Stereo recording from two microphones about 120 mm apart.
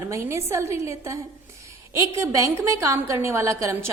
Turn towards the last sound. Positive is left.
turn(degrees=-25)  # may be behind; listen again after turning